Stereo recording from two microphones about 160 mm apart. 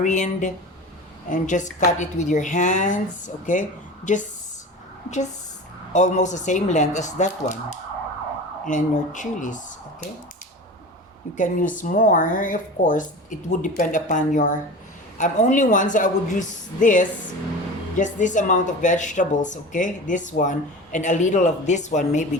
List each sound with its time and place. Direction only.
0.0 s a woman's voice: 50° left (ahead or behind)
5.9 s a woman's voice: 45° left (ahead or behind)
8.6 s a woman's voice: 55° left (ahead or behind)
11.3 s a woman's voice: 55° left (ahead or behind)